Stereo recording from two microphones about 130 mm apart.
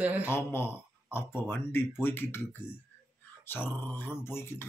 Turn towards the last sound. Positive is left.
turn(degrees=20)  # may be behind; listen again after turning